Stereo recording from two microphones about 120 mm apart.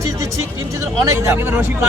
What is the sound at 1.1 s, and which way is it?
Speech, 20° right (ahead or behind).